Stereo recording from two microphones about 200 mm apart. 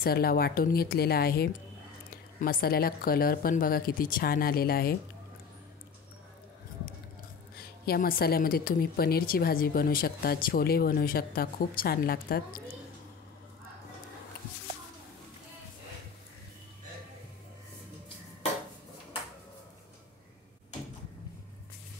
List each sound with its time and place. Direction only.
0.0 s speech: 50° left (ahead or behind)
7.5 s speech: 50° left (ahead or behind)